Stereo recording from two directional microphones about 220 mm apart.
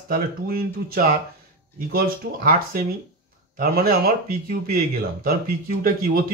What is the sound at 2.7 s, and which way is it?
A man's voice, 40° right (ahead or behind).